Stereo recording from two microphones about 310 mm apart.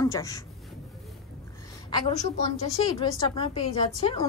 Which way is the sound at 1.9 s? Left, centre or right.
Centre.